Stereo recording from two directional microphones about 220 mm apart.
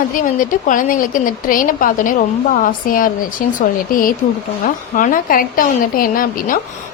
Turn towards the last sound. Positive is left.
turn(degrees=40)  # may be behind; listen again after turning